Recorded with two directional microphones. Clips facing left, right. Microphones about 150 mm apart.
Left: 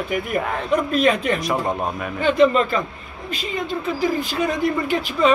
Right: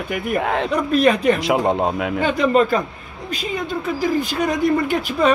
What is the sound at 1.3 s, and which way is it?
Speech, 85° right.